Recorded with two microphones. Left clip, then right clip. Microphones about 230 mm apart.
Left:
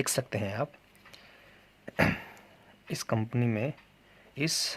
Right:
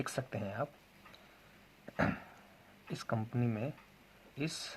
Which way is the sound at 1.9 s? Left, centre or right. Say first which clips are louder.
Left 7 dB; left.